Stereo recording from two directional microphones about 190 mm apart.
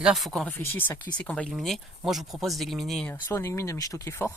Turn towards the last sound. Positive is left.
turn(degrees=15)  # may be behind; listen again after turning